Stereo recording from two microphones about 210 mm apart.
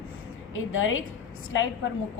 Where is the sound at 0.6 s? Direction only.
70° left (ahead or behind).